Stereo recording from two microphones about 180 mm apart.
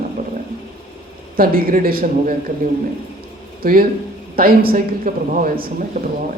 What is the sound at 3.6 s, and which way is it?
A man's voice, 55° right (ahead or behind).